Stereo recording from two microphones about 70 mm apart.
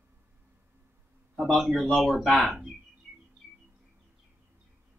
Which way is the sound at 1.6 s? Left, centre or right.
Centre.